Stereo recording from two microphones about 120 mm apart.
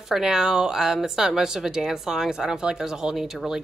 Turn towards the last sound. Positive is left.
turn(degrees=-5)  # may be behind; listen again after turning